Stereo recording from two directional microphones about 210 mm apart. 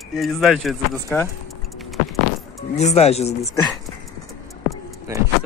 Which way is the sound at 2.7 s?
30° left (ahead or behind).